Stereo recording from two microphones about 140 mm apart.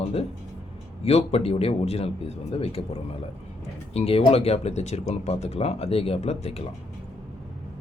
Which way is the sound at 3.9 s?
45° left (ahead or behind).